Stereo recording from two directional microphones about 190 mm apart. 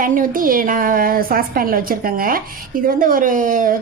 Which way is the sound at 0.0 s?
45° right (ahead or behind).